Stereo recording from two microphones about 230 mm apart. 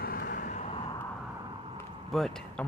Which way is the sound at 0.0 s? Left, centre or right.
Left.